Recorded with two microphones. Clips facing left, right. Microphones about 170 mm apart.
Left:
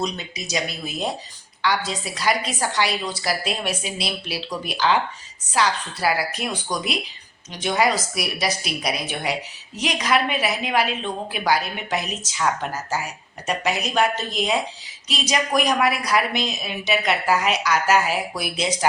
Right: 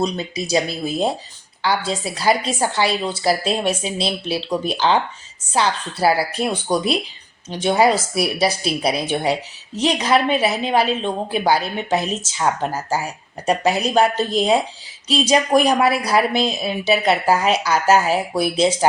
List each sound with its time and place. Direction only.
0.0 s speech: 30° right (ahead or behind)